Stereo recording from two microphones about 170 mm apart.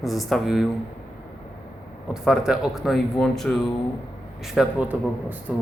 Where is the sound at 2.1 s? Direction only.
5° right (ahead or behind).